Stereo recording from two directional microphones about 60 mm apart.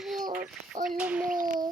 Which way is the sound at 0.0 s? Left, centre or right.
Centre.